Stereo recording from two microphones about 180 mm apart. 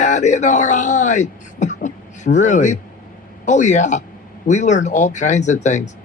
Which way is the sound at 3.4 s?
40° left (ahead or behind).